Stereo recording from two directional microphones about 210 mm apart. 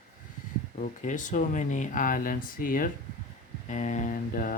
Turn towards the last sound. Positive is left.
turn(degrees=40)  # may be behind; listen again after turning